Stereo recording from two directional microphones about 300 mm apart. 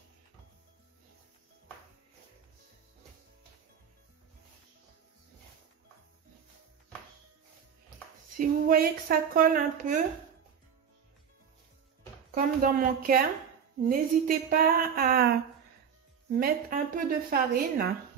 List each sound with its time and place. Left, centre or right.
8.4 s a woman's voice: right
12.4 s a woman's voice: right
16.3 s a woman's voice: right